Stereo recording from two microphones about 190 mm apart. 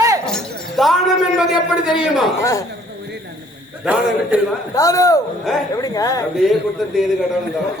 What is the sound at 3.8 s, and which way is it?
Speech, 5° right (ahead or behind).